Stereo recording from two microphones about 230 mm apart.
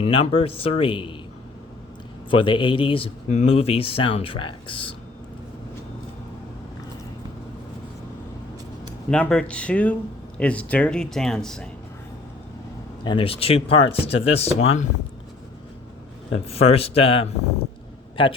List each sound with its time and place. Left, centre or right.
0.0 s speech: left
2.3 s speech: left
9.0 s speech: centre
13.1 s speech: left
16.3 s speech: left